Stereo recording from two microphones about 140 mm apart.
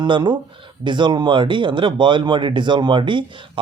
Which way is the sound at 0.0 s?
30° right (ahead or behind).